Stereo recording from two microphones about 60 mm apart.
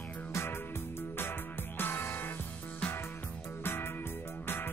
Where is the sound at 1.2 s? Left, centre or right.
Left.